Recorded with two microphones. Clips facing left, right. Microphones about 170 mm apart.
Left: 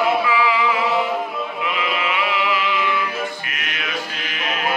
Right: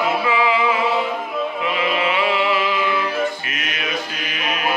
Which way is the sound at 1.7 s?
30° right (ahead or behind).